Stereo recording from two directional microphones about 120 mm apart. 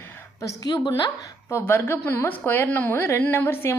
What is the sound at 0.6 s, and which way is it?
Speech, 35° left (ahead or behind).